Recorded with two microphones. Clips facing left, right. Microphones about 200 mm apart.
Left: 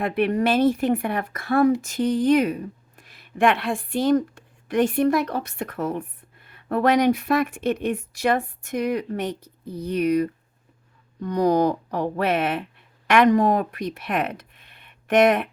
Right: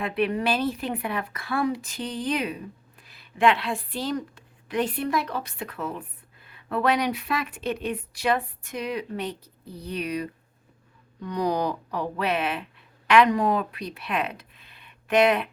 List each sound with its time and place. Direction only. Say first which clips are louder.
0.0 s speech: left 4 dB; 45° left (ahead or behind)